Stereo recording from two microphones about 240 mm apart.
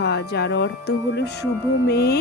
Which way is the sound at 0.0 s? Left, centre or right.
Left.